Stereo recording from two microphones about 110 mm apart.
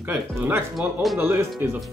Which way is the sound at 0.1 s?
15° right (ahead or behind).